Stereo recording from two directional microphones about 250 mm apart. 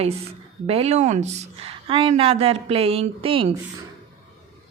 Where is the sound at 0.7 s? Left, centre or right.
Right.